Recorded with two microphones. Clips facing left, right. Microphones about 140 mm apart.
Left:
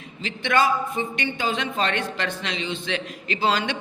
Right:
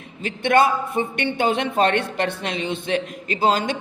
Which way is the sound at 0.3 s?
55° right (ahead or behind).